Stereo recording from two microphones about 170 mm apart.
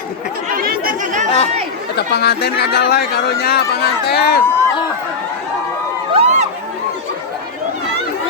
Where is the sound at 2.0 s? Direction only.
75° left (ahead or behind).